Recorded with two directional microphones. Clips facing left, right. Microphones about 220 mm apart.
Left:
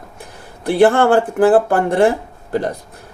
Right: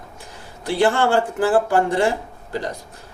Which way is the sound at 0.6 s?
55° left (ahead or behind).